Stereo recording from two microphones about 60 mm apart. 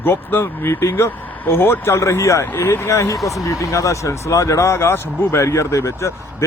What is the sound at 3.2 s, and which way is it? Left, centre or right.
Speech, left.